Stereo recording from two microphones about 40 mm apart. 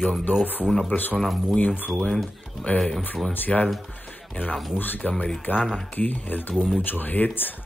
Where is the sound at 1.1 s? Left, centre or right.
Centre.